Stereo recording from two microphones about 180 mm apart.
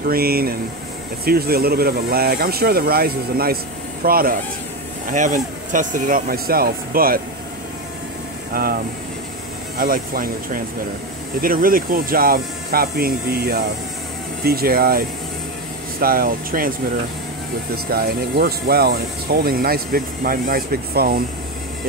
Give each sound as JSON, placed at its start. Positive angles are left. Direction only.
{"t": 0.0, "sound": "speech", "side_deg": -55}
{"t": 8.5, "sound": "speech", "side_deg": -55}
{"t": 17.8, "sound": "speech", "side_deg": -60}